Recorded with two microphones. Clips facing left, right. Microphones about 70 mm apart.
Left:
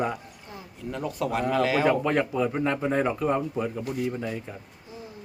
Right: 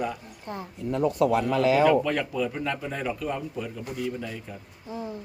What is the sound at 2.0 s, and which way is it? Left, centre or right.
A man's voice, left.